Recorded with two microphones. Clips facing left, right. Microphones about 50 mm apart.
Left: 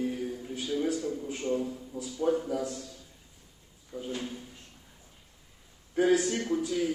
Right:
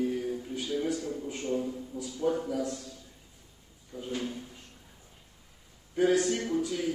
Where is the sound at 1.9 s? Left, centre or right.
Left.